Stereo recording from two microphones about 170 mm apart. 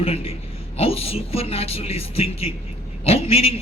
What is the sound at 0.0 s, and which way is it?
A man's voice, 35° left (ahead or behind).